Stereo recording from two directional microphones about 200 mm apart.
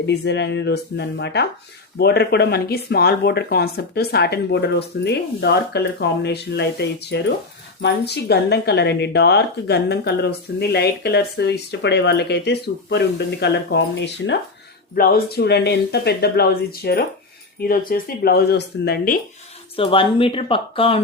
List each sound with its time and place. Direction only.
0.0 s speech: 60° left (ahead or behind)
14.9 s speech: 45° left (ahead or behind)
19.7 s speech: 25° left (ahead or behind)